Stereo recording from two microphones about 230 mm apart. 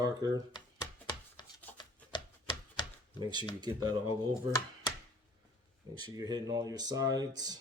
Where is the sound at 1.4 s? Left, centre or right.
Centre.